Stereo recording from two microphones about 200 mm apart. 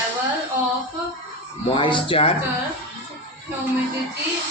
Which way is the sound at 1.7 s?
25° left (ahead or behind).